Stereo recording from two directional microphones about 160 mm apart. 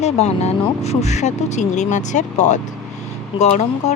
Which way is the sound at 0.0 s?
40° left (ahead or behind).